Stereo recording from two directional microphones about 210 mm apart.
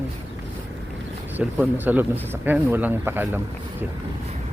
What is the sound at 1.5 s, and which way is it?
Speech, 10° right (ahead or behind).